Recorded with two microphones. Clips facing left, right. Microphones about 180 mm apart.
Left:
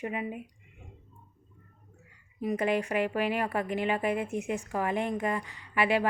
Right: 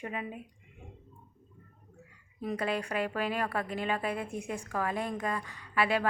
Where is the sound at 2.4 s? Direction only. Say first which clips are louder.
Left 4 dB; 15° left (ahead or behind).